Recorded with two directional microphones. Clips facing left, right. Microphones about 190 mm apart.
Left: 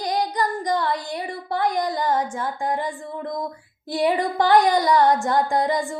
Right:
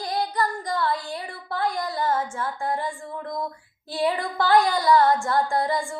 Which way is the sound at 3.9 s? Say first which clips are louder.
Left 4 dB; 15° left (ahead or behind).